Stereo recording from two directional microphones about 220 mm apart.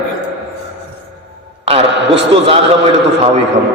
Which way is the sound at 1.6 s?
25° right (ahead or behind).